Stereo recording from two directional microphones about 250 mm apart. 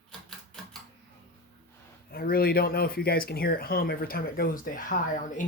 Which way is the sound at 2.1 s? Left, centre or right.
Left.